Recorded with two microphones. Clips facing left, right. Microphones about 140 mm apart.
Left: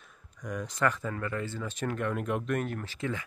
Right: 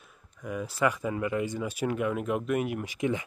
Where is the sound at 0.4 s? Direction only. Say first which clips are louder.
Right 2 dB; 5° right (ahead or behind).